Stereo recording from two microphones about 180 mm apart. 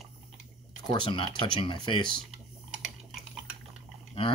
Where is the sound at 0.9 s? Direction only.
30° left (ahead or behind).